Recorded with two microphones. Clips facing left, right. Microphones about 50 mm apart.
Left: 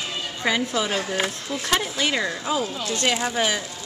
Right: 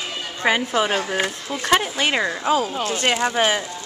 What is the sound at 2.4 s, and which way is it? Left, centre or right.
Speech, right.